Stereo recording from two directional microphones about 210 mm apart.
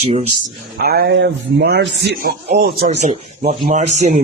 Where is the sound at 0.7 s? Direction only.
45° right (ahead or behind).